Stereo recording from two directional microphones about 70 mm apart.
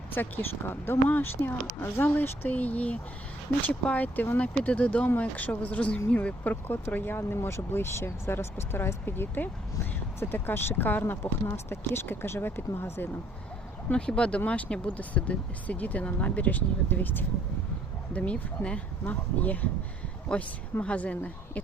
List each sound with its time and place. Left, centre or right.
0.1 s speech: left
11.0 s speech: left
13.9 s speech: centre
18.1 s a woman's voice: centre